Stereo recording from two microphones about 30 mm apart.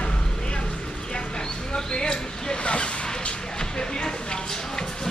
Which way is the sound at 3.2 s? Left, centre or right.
Left.